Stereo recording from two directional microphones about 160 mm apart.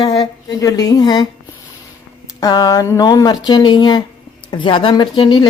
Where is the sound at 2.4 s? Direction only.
25° left (ahead or behind).